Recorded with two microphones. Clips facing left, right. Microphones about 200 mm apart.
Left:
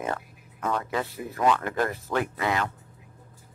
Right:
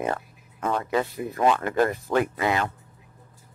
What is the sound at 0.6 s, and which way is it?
Speech, 20° right (ahead or behind).